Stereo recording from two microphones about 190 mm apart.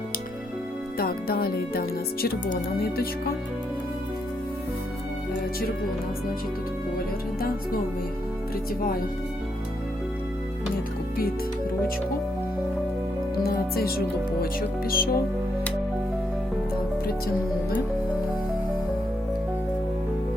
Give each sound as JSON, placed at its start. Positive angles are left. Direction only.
{"t": 0.9, "sound": "speech", "side_deg": 50}
{"t": 13.4, "sound": "speech", "side_deg": 55}